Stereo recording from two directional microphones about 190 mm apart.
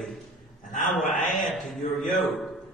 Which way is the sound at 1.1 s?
45° left (ahead or behind).